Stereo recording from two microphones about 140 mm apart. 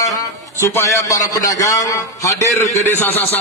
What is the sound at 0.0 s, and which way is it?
A man's voice, 20° left (ahead or behind).